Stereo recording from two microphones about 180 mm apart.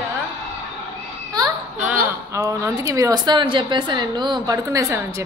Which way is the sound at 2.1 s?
15° right (ahead or behind).